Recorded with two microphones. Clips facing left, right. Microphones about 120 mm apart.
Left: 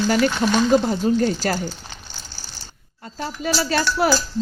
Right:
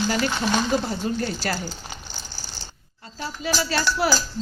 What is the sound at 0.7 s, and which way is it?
Speech, 40° left (ahead or behind).